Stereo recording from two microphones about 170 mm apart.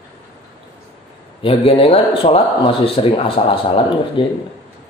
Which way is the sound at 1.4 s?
35° left (ahead or behind).